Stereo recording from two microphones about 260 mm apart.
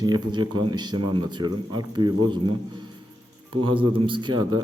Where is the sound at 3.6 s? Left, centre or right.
Centre.